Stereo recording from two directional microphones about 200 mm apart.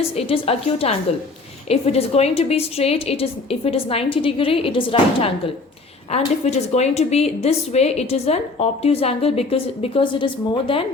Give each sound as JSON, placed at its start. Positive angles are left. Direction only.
{"t": 0.2, "sound": "a woman's voice", "side_deg": 30}